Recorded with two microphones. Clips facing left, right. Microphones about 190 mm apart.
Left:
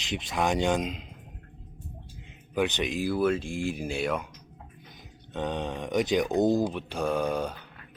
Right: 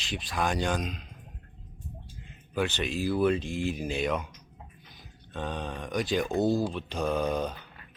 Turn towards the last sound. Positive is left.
turn(degrees=10)  # may be behind; listen again after turning